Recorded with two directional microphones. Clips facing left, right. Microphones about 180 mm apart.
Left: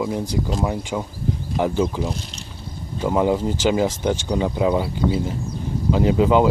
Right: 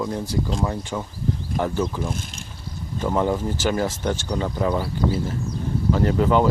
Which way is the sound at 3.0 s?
10° left (ahead or behind).